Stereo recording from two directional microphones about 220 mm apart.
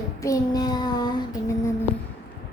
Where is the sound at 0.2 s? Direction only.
15° left (ahead or behind).